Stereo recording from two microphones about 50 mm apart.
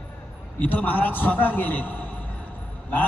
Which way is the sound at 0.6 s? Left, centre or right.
Left.